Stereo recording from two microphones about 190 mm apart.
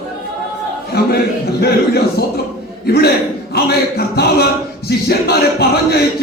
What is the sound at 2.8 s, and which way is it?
A man's voice, 55° left (ahead or behind).